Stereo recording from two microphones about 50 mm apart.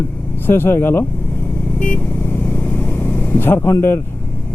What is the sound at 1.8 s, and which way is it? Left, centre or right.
Vehicle, left.